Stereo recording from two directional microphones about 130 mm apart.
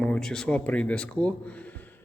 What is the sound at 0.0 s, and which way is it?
Speech, 5° left (ahead or behind).